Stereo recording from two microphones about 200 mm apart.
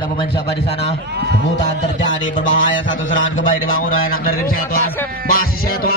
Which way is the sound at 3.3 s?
45° left (ahead or behind).